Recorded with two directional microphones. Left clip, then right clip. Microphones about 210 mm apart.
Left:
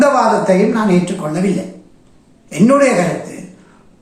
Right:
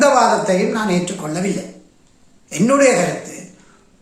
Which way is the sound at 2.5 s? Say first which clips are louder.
Left 2 dB; 5° right (ahead or behind).